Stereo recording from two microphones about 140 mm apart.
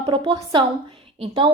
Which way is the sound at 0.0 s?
30° right (ahead or behind).